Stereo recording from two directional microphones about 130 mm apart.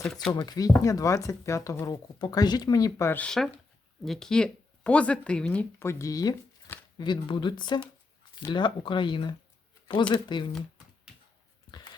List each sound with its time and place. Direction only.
0.0 s speech: 5° left (ahead or behind)
0.3 s speech: 30° left (ahead or behind)
3.1 s speech: 10° left (ahead or behind)
5.8 s speech: 20° left (ahead or behind)